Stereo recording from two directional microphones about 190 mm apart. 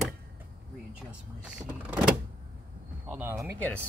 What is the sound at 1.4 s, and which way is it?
Speech, 5° right (ahead or behind).